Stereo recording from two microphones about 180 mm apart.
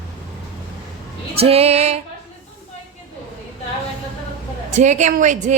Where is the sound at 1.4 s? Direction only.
35° right (ahead or behind).